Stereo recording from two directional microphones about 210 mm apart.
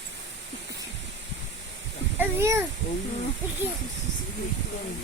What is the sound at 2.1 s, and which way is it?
Child singing, 10° right (ahead or behind).